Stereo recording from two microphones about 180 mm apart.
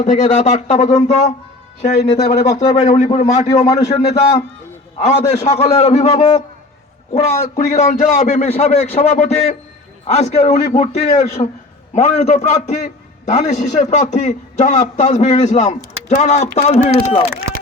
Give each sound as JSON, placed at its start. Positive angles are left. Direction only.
{"t": 0.0, "sound": "a man's voice", "side_deg": 40}
{"t": 4.9, "sound": "a man's voice", "side_deg": 40}